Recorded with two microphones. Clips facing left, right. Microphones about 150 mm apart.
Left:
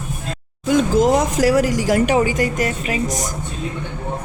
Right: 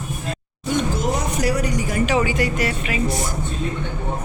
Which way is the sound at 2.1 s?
45° left (ahead or behind).